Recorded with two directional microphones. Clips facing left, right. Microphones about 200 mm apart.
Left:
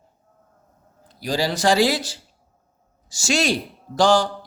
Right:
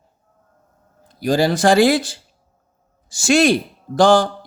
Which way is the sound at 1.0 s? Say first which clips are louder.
Right 7 dB; 50° right (ahead or behind).